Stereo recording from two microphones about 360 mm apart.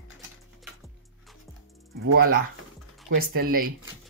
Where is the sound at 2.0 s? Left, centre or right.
Right.